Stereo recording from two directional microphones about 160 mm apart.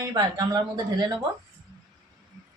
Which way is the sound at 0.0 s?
25° right (ahead or behind).